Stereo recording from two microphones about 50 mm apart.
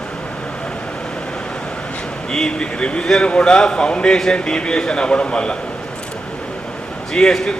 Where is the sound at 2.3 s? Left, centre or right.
Centre.